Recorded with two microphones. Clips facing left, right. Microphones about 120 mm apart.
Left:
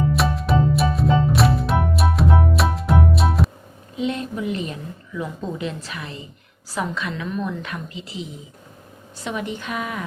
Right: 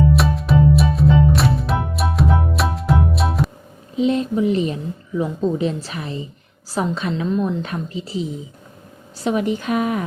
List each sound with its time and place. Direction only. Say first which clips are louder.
0.1 s music: right 3 dB; centre (ahead or behind)
3.9 s a woman's voice: right 7 dB; 30° right (ahead or behind)